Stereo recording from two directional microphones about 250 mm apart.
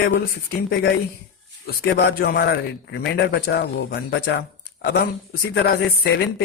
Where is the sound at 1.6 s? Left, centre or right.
Left.